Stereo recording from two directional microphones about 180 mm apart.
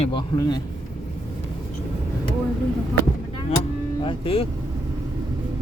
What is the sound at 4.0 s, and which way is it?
Speech, 30° left (ahead or behind).